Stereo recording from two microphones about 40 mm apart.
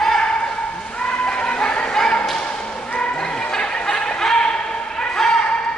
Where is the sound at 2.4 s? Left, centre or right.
Left.